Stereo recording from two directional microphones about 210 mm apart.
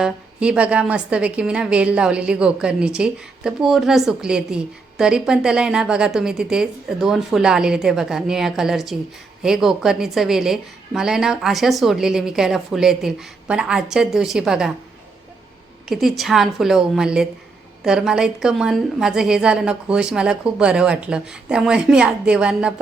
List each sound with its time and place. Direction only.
0.0 s a woman's voice: 5° right (ahead or behind)
15.9 s a woman's voice: centre (ahead or behind)